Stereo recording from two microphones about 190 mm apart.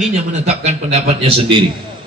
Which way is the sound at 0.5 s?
35° right (ahead or behind).